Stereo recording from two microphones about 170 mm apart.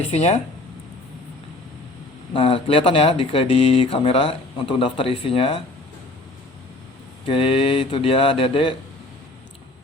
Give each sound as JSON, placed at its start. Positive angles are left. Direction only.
{"t": 0.1, "sound": "speech", "side_deg": 40}
{"t": 2.3, "sound": "speech", "side_deg": 30}
{"t": 7.3, "sound": "speech", "side_deg": 30}